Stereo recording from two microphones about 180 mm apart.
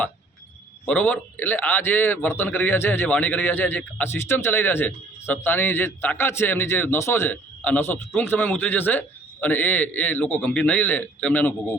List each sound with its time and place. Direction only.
0.9 s a man's voice: 10° left (ahead or behind)